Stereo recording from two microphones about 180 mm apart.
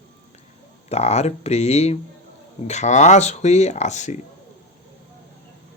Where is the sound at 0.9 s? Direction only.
35° left (ahead or behind).